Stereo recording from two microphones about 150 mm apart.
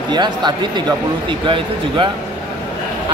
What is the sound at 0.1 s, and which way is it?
Speech, 30° right (ahead or behind).